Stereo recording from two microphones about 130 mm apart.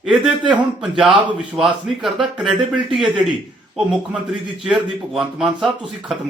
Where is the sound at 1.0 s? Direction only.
5° right (ahead or behind).